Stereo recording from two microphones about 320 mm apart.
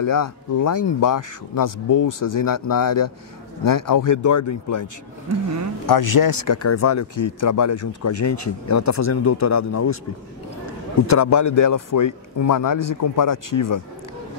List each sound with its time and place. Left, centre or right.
0.0 s speech: left
5.9 s speech: left
6.7 s speech: left
7.8 s speech: left
11.1 s speech: left